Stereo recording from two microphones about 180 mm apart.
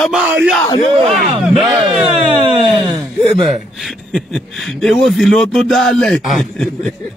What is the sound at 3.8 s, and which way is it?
Speech, centre (ahead or behind).